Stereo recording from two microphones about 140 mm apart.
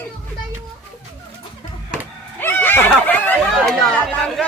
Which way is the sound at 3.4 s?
Centre (ahead or behind).